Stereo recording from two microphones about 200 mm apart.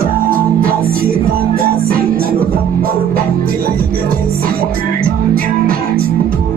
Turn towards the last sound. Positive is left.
turn(degrees=-45)  # may be behind; listen again after turning